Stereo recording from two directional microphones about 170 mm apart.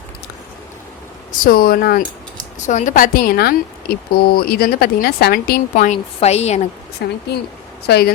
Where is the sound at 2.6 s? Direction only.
45° left (ahead or behind); by 5.6 s 65° left (ahead or behind).